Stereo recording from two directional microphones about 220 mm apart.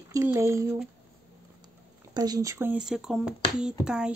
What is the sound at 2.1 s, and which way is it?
Speech, 15° right (ahead or behind).